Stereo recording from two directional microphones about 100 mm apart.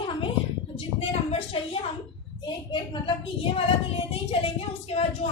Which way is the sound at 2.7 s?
55° left (ahead or behind).